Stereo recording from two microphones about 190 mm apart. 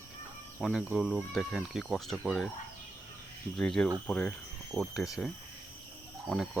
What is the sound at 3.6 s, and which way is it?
Speech, centre (ahead or behind).